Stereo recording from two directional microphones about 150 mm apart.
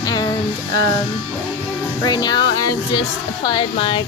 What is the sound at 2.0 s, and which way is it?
Speech, 25° left (ahead or behind).